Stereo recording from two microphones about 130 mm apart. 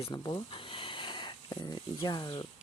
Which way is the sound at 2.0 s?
35° left (ahead or behind).